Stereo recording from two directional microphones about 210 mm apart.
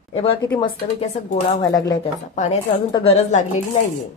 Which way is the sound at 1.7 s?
15° left (ahead or behind).